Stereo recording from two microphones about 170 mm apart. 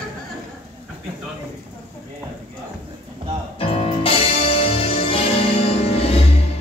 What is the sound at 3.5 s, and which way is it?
Music, 35° left (ahead or behind).